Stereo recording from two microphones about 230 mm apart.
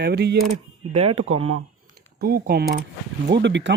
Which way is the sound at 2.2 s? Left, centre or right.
Right.